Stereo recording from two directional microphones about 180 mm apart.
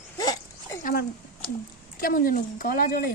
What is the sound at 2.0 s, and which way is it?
Speech, 50° left (ahead or behind).